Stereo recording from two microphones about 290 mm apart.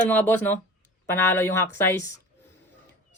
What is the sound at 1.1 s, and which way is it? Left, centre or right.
Speech, centre.